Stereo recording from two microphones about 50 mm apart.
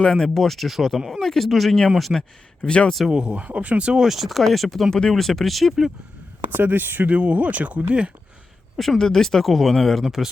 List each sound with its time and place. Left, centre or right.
0.0 s speech: centre
0.4 s speech: centre
2.1 s a man's voice: centre
2.6 s speech: left
3.1 s speech: right
4.0 s speech: centre
6.5 s speech: right
7.1 s speech: right
9.0 s speech: centre